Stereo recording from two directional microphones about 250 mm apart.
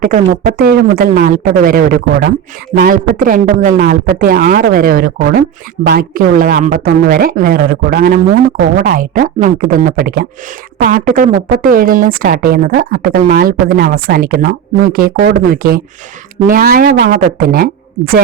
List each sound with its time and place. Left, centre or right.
0.0 s speech: right